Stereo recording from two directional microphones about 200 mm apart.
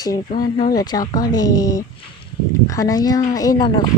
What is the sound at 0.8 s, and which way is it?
A child's voice, 20° left (ahead or behind).